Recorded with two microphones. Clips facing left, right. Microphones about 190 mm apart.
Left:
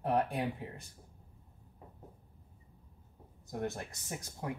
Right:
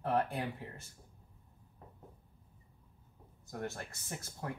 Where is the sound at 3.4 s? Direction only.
20° left (ahead or behind).